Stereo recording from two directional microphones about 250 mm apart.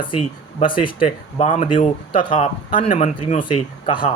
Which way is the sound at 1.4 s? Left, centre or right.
Left.